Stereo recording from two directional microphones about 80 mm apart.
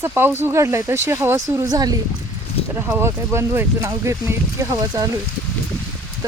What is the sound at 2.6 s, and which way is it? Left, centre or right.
Speech, right.